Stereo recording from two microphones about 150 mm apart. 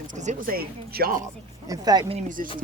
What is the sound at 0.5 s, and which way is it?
Speech, 90° right.